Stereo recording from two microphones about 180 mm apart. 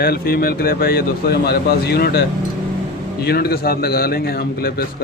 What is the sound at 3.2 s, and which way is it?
Speech, 60° left (ahead or behind).